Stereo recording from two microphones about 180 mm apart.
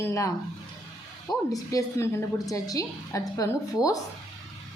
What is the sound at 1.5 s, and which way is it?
A woman's voice, 20° left (ahead or behind).